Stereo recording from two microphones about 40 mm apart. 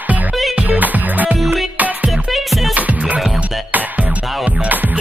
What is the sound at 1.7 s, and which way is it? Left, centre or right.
Music, right.